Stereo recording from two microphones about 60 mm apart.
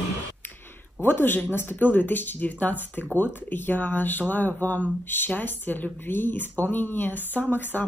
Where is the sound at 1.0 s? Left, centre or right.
Left.